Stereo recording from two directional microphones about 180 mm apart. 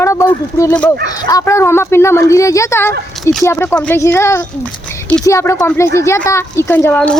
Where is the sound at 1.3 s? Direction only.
15° left (ahead or behind).